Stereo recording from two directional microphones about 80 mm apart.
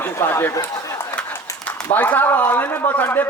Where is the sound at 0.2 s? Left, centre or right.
Left.